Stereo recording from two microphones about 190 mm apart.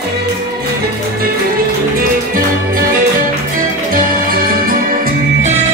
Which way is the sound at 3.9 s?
50° right (ahead or behind).